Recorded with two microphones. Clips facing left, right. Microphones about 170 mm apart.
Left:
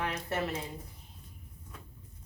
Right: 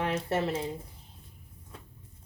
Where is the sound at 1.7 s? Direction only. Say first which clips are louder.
Right 2 dB; 30° right (ahead or behind).